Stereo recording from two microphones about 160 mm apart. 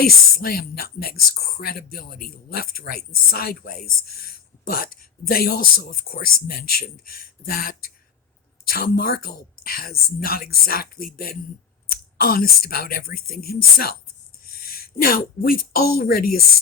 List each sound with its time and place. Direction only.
0.0 s a woman's voice: 70° left (ahead or behind)